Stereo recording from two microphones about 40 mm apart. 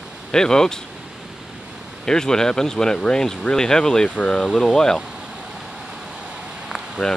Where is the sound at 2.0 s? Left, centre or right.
Centre.